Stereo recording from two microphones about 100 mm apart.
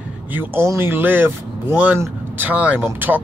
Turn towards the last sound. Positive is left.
turn(degrees=-20)  # may be behind; listen again after turning